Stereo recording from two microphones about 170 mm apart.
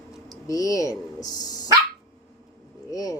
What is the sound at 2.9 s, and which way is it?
Speech, 20° left (ahead or behind).